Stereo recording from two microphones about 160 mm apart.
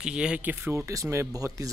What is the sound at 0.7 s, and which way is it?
Speech, 20° right (ahead or behind).